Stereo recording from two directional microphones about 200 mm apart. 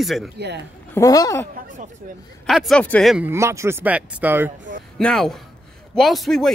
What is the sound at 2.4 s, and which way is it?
Speech, centre (ahead or behind).